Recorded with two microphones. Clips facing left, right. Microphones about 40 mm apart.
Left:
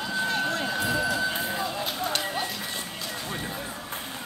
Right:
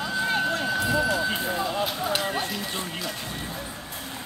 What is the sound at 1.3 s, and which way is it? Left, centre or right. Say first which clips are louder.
Clip-clop: right 2 dB; centre.